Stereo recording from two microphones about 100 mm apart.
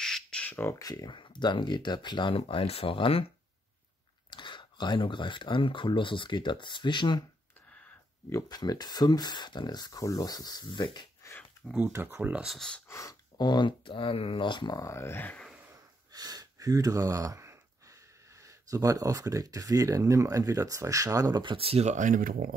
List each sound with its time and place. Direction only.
0.0 s squawk: 5° left (ahead or behind)
0.7 s speech: 35° left (ahead or behind)
1.1 s speech: 50° left (ahead or behind)
2.3 s speech: 70° left (ahead or behind)
4.3 s speech: 50° left (ahead or behind)
8.3 s speech: 35° left (ahead or behind)
11.9 s speech: 20° right (ahead or behind)
12.4 s speech: 5° left (ahead or behind)
12.8 s speech: 30° left (ahead or behind)
13.4 s speech: 50° left (ahead or behind)
14.8 s speech: 30° left (ahead or behind)
16.1 s speech: 40° right (ahead or behind)
21.4 s speech: 60° right (ahead or behind)